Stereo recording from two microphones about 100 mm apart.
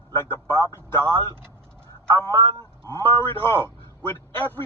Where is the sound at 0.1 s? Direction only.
25° left (ahead or behind).